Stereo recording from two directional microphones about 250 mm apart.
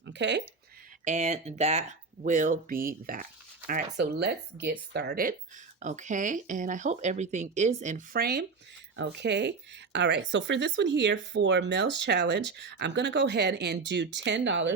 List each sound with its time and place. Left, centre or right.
0.1 s speech: right
1.0 s speech: right